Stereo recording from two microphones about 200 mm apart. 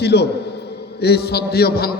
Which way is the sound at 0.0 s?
55° left (ahead or behind).